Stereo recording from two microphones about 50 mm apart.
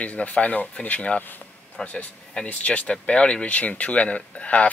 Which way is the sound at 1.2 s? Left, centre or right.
Left.